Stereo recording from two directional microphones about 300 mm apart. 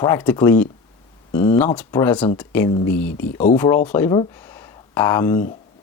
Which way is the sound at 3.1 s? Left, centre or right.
Left.